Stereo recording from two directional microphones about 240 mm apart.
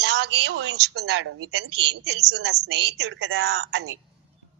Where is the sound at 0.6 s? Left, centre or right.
Right.